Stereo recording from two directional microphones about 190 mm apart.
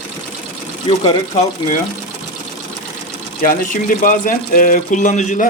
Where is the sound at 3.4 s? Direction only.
40° left (ahead or behind).